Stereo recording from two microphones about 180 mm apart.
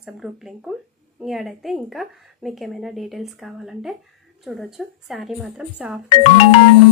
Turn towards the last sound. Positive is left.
turn(degrees=30)  # may be behind; listen again after turning